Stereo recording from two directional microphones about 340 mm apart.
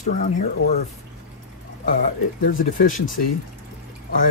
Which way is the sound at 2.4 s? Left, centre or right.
Left.